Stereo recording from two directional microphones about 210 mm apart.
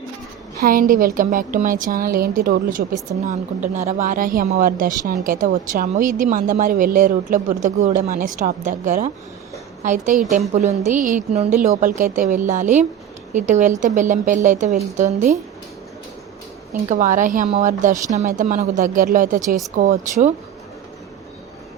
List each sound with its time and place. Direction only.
0.6 s a woman's voice: 40° right (ahead or behind)
16.9 s a woman's voice: 35° right (ahead or behind)